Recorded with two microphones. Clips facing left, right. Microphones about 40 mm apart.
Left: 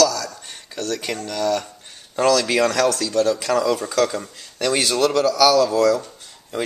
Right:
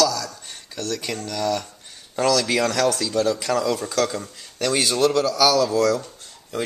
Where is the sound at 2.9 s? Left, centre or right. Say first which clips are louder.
Left 2 dB; centre.